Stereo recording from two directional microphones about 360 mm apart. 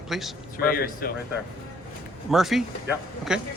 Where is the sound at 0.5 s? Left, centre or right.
Left.